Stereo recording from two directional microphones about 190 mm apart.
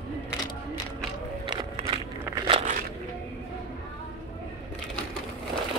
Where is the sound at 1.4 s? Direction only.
30° right (ahead or behind).